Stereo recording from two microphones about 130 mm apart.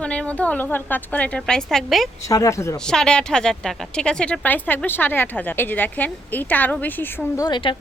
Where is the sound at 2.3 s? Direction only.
25° left (ahead or behind).